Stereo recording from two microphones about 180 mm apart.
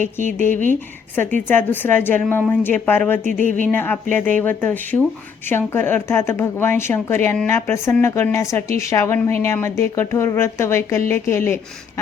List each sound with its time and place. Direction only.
0.0 s speech: 45° right (ahead or behind)
0.7 s a woman's voice: 10° left (ahead or behind)
3.4 s speech: 45° right (ahead or behind)
3.7 s a woman's voice: 10° left (ahead or behind)